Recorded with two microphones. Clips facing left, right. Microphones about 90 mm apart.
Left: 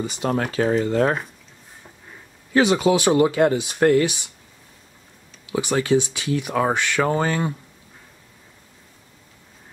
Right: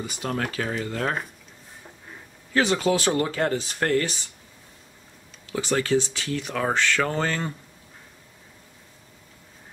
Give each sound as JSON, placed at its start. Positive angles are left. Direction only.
{"t": 0.0, "sound": "speech", "side_deg": 25}
{"t": 2.5, "sound": "speech", "side_deg": 15}
{"t": 5.5, "sound": "speech", "side_deg": 15}